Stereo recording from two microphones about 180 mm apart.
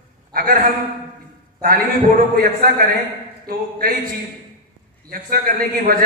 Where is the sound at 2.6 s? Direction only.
55° right (ahead or behind).